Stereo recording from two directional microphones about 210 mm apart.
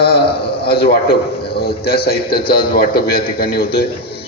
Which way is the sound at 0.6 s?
50° left (ahead or behind).